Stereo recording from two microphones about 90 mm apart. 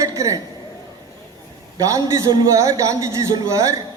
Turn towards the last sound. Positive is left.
turn(degrees=-35)  # may be behind; listen again after turning